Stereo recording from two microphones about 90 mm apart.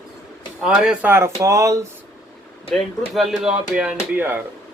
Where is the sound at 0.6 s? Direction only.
10° right (ahead or behind).